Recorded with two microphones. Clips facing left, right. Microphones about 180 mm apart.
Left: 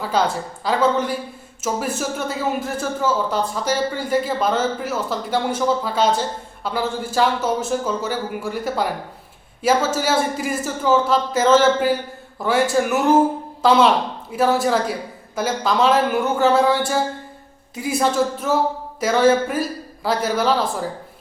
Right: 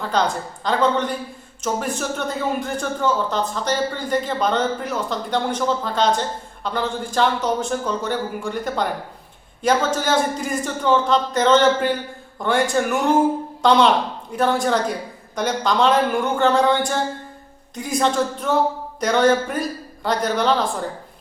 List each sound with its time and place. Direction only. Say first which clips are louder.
0.0 s a man's voice: left 1 dB; 5° left (ahead or behind)